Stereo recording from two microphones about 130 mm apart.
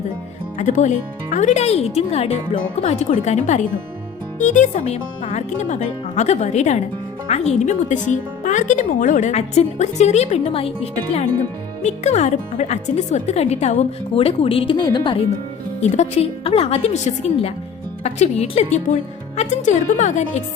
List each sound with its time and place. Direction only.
0.6 s speech: 70° left (ahead or behind); by 15.2 s 35° left (ahead or behind)
15.8 s a woman's voice: 60° left (ahead or behind)
19.4 s speech: 70° left (ahead or behind)